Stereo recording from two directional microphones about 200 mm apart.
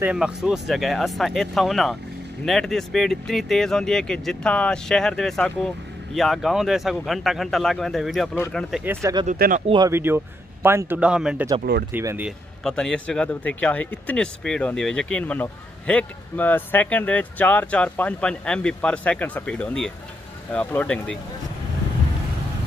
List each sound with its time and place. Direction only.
0.0 s speech: 5° right (ahead or behind)
8.8 s speech: 15° right (ahead or behind)
9.2 s speech: 40° right (ahead or behind)
9.7 s speech: 15° right (ahead or behind)
12.3 s a man's voice: centre (ahead or behind)